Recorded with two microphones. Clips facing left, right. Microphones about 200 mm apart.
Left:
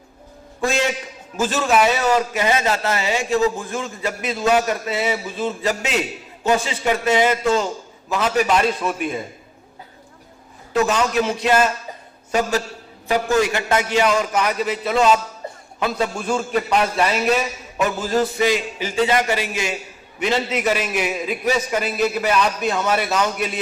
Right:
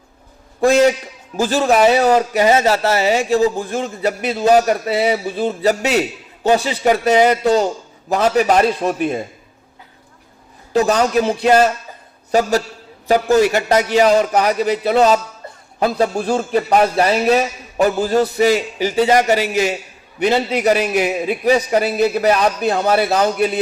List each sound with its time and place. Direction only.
1.4 s a man's voice: 35° right (ahead or behind)
10.7 s a man's voice: 35° right (ahead or behind)